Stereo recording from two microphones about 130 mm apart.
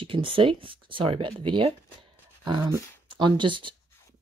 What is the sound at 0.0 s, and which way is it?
Speech, 40° right (ahead or behind).